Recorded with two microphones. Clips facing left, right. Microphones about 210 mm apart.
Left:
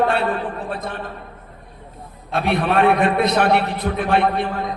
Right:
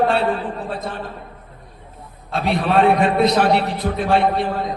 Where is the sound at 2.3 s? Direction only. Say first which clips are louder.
Even; 60° left (ahead or behind).